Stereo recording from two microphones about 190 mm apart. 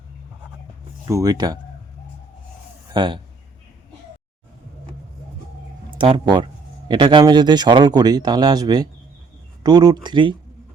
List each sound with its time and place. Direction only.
1.0 s speech: 15° right (ahead or behind)
2.9 s speech: 25° right (ahead or behind)
6.0 s speech: 25° right (ahead or behind)